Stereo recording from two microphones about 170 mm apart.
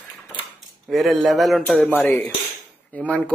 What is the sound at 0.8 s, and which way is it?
Speech, centre (ahead or behind).